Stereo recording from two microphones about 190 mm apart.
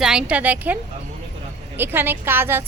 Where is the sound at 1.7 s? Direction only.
10° right (ahead or behind).